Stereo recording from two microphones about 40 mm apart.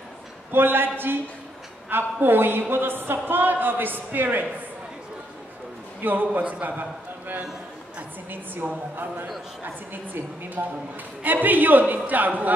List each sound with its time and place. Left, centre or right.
0.5 s a woman's voice: right
6.0 s a man's voice: right
8.6 s a man's voice: right
10.6 s speech: right
11.2 s a man's voice: right